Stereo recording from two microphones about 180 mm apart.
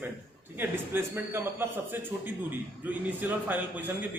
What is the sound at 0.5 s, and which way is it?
A man's voice, 10° right (ahead or behind).